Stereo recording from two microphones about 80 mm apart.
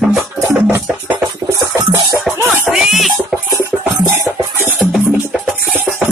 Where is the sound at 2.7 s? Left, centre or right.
Centre.